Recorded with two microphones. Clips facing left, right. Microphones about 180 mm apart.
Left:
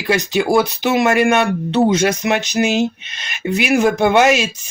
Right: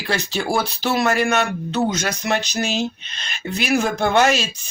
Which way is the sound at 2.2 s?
15° left (ahead or behind).